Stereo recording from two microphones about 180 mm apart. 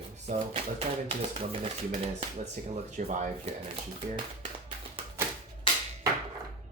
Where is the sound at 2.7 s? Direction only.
40° right (ahead or behind).